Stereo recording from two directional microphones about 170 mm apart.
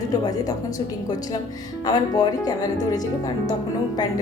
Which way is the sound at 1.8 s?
25° left (ahead or behind).